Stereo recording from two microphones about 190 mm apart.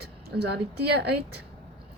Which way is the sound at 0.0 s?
60° right (ahead or behind).